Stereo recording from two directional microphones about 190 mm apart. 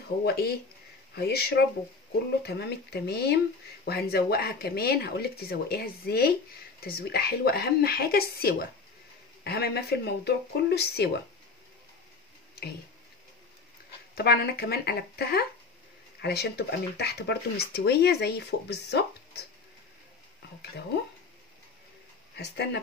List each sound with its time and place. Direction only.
0.2 s speech: 55° left (ahead or behind)
14.1 s speech: 55° left (ahead or behind)
22.3 s speech: 65° left (ahead or behind)